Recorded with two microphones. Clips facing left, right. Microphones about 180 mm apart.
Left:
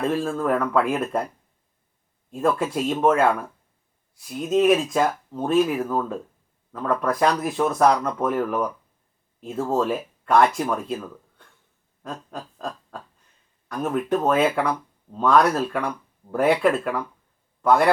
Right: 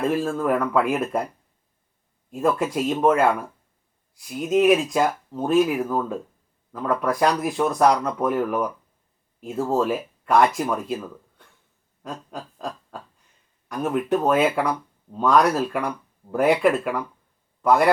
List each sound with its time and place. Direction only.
0.0 s speech: 5° right (ahead or behind)
2.3 s speech: 5° right (ahead or behind)
12.0 s a sound: 5° right (ahead or behind)
13.7 s speech: 5° right (ahead or behind)